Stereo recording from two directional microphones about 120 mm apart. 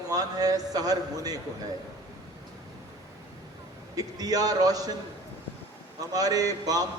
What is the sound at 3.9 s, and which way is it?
A man's voice, 30° right (ahead or behind).